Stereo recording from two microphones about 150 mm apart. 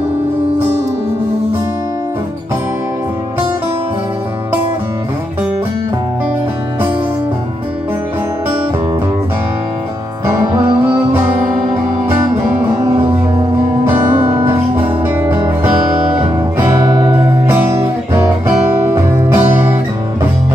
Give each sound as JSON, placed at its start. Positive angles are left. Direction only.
{"t": 10.2, "sound": "music", "side_deg": -15}
{"t": 14.2, "sound": "music", "side_deg": -15}
{"t": 17.5, "sound": "music", "side_deg": -15}